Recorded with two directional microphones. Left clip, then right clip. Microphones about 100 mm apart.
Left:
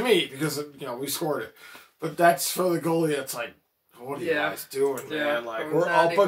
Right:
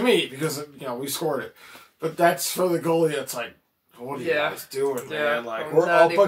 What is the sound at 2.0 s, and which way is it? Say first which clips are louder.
Speech: even; 20° left (ahead or behind).